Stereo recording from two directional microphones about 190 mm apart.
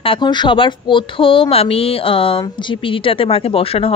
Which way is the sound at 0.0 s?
25° left (ahead or behind).